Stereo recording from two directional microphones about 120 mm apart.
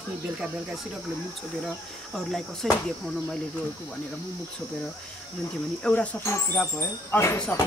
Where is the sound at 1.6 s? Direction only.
Centre (ahead or behind).